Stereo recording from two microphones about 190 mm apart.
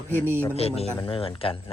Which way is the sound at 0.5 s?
30° left (ahead or behind).